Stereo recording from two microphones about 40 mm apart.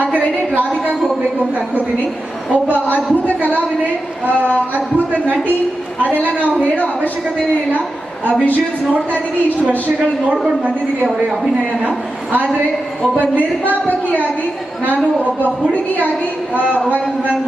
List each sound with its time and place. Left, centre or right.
2.7 s a woman's voice: left
6.0 s a woman's voice: right
6.7 s a woman's voice: left
11.8 s a woman's voice: right